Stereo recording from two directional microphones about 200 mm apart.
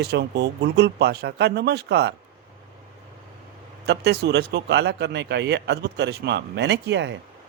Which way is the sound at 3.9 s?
55° right (ahead or behind).